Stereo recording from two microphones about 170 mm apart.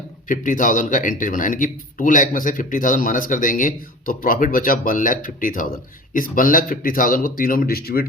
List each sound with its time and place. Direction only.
0.3 s speech: 50° left (ahead or behind)